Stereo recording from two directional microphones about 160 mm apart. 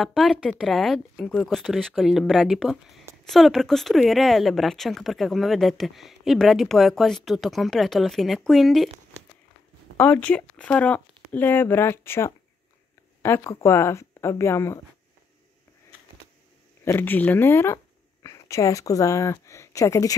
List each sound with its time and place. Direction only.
0.0 s speech: centre (ahead or behind)
9.9 s speech: 10° left (ahead or behind)
16.8 s speech: 15° left (ahead or behind)